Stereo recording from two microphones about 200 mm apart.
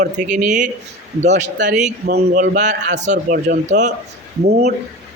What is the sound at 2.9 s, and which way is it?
A man's voice, 35° right (ahead or behind).